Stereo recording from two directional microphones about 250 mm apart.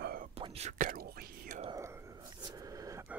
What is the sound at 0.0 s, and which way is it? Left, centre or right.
Whispering, right.